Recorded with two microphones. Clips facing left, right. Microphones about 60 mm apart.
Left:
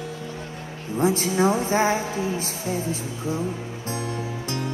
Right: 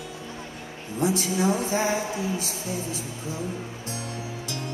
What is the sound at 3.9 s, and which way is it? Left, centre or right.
Music, left.